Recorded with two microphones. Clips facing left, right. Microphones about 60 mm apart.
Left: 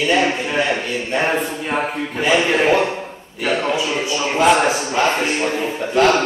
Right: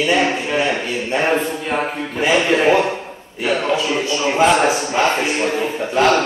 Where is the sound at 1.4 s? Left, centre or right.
Centre.